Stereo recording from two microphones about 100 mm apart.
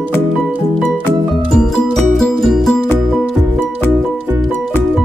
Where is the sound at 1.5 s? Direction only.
5° left (ahead or behind).